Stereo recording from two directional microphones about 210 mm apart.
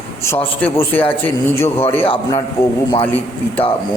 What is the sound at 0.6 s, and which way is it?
A man's voice, 10° left (ahead or behind).